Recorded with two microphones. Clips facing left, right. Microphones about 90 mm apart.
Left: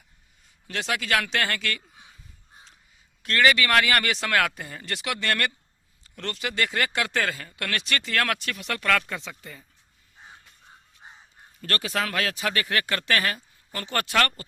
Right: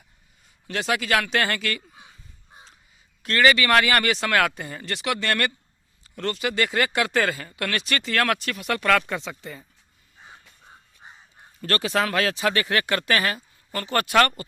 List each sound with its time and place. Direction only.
0.7 s speech: 5° right (ahead or behind)
3.2 s speech: centre (ahead or behind)
8.7 s speech: 20° right (ahead or behind)
11.6 s speech: 30° right (ahead or behind)
12.8 s speech: 15° right (ahead or behind)
14.1 s speech: 15° right (ahead or behind)